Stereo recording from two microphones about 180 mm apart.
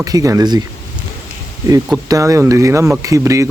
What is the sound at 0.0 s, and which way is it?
Speech, 20° right (ahead or behind).